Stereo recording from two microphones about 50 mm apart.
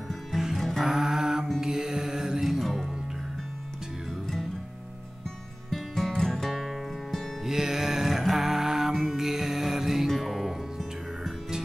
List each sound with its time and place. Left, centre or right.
0.6 s music: centre
0.8 s mantra: centre
5.7 s music: centre
7.4 s music: centre